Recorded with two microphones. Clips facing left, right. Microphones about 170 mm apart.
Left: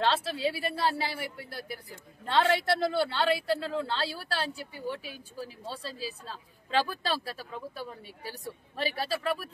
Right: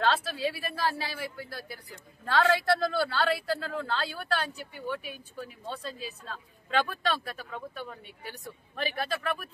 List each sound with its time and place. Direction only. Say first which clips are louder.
0.0 s a woman's voice: even; 25° left (ahead or behind)